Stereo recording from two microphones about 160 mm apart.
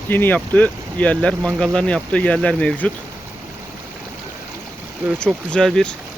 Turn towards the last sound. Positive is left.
turn(degrees=5)  # may be behind; listen again after turning